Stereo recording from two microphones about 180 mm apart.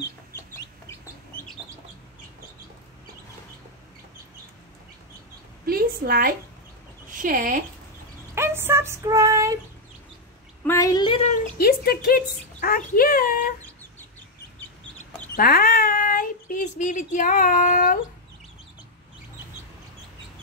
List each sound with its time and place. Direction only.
0.5 s chicken: 15° left (ahead or behind)
5.7 s a sound: 55° right (ahead or behind)
7.2 s speech: 50° right (ahead or behind)
8.4 s a sound: 15° right (ahead or behind)
10.7 s a woman's voice: 20° left (ahead or behind)
11.5 s speech: 55° left (ahead or behind)
15.3 s speech: 55° left (ahead or behind)